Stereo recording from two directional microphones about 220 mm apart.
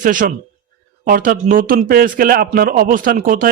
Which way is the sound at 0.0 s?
35° right (ahead or behind).